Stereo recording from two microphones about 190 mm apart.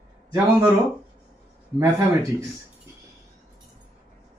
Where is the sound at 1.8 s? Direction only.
10° right (ahead or behind).